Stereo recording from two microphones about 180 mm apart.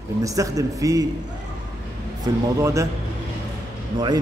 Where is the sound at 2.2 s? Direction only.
15° right (ahead or behind).